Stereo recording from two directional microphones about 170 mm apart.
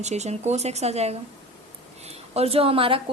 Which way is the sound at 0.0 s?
40° right (ahead or behind).